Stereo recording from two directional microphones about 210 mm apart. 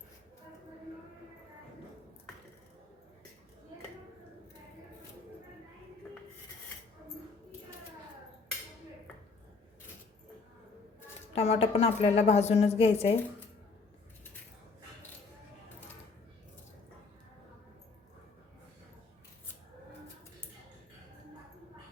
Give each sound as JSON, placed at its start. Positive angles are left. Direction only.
{"t": 11.3, "sound": "a woman's voice", "side_deg": 30}